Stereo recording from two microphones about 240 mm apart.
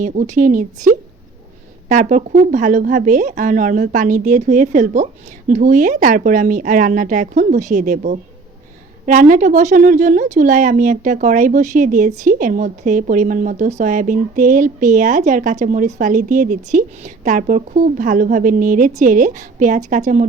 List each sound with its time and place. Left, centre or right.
0.0 s speech: right